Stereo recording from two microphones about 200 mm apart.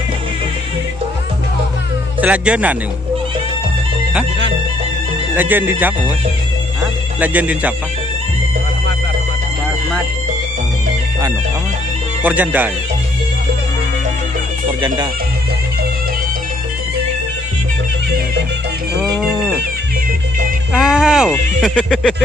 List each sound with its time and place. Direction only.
2.2 s speech: 5° right (ahead or behind)
5.3 s speech: 10° right (ahead or behind)
6.8 s music: 5° right (ahead or behind)
12.2 s speech: 10° right (ahead or behind)
14.7 s speech: 20° right (ahead or behind)
19.1 s music: 5° right (ahead or behind)
20.7 s speech: 5° right (ahead or behind)